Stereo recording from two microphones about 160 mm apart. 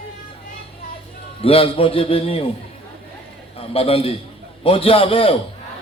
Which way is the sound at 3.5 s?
35° left (ahead or behind).